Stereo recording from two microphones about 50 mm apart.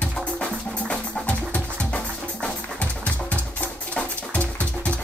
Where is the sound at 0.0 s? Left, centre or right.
Left.